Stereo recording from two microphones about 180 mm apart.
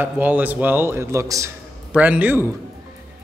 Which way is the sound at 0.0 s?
10° right (ahead or behind).